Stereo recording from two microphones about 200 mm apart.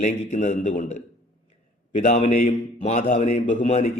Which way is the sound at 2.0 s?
35° left (ahead or behind).